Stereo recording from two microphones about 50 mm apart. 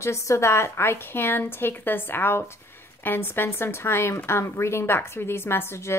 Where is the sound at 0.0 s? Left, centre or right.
Left.